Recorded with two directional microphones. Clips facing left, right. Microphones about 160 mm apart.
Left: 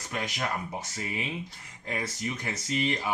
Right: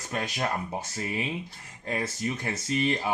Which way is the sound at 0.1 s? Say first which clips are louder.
Right 2 dB; 30° right (ahead or behind).